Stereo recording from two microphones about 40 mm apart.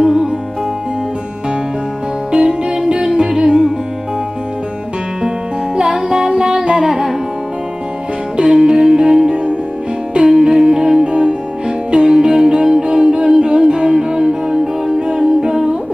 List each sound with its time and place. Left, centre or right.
0.0 s music: centre
2.3 s music: right
5.8 s music: centre
6.9 s music: centre
8.4 s music: centre
9.3 s music: right
10.1 s music: centre